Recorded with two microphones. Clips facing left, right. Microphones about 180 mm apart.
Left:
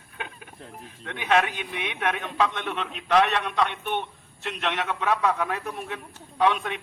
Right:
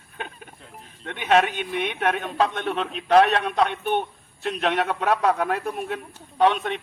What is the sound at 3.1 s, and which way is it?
A man's voice, 50° right (ahead or behind).